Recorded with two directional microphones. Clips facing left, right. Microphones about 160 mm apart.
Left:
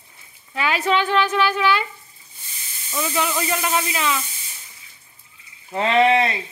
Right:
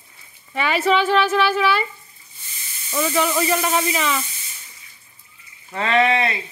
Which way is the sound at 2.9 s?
Centre (ahead or behind).